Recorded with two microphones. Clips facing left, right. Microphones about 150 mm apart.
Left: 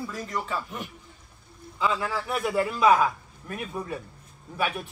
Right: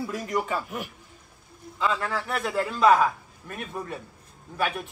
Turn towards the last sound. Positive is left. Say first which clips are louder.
# right 1 dB
turn(degrees=0)  # may be behind; listen again after turning